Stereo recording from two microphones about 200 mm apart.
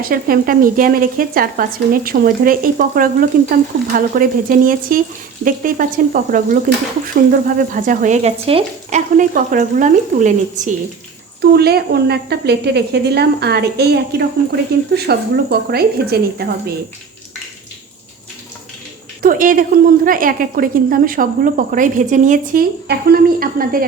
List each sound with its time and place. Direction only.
0.0 s speech: 45° right (ahead or behind)
11.3 s speech: 55° right (ahead or behind)
19.2 s speech: 45° right (ahead or behind)